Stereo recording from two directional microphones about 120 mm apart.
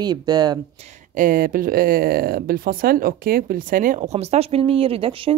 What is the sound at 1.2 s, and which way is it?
Speech, 90° right.